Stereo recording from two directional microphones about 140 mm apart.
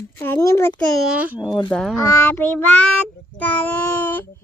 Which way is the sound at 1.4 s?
30° left (ahead or behind).